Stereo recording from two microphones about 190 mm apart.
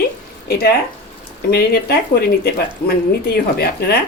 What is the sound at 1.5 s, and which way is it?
Speech, 55° left (ahead or behind).